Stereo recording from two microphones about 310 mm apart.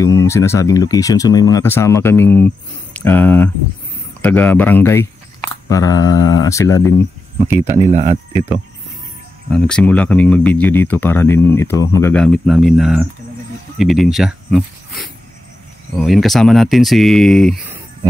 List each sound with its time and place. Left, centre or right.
0.0 s speech: centre
7.7 s speech: right
9.5 s speech: centre